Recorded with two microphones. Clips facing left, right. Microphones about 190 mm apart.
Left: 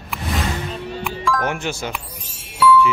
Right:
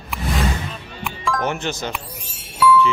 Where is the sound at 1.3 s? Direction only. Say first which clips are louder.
Even; 5° left (ahead or behind).